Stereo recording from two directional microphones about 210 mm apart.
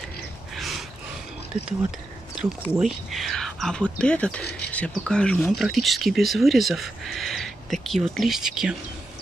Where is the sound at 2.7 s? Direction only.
Centre (ahead or behind).